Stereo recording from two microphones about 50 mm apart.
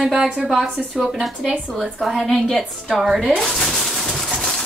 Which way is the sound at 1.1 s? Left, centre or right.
Centre.